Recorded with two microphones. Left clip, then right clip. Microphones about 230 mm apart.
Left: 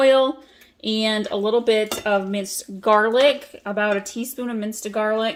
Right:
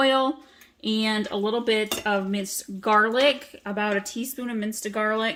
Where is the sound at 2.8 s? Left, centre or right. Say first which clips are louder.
Left 3 dB; right.